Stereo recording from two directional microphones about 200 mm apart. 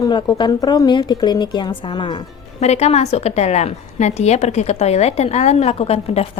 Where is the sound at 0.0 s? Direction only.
20° left (ahead or behind).